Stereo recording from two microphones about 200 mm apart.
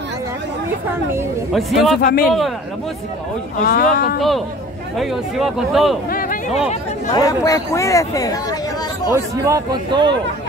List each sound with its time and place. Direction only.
1.5 s speech: centre (ahead or behind)
2.0 s speech: 45° left (ahead or behind)
2.2 s speech: centre (ahead or behind)
3.5 s speech: 45° left (ahead or behind)
4.9 s speech: centre (ahead or behind)
6.0 s a sound: 45° left (ahead or behind)
7.2 s speech: 15° left (ahead or behind)
9.1 s a man's voice: 15° right (ahead or behind)